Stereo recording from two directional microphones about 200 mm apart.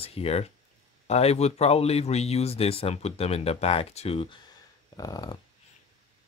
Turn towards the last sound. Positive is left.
turn(degrees=20)  # may be behind; listen again after turning